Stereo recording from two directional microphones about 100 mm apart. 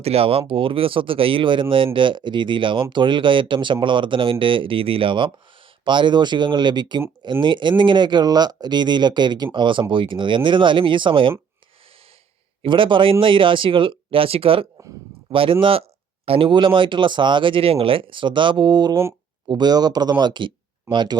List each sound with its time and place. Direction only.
0.0 s speech: 85° right; by 11.3 s 60° right (ahead or behind)
12.6 s speech: 55° right (ahead or behind)
16.2 s speech: 75° right (ahead or behind)
16.5 s speech: 55° right (ahead or behind)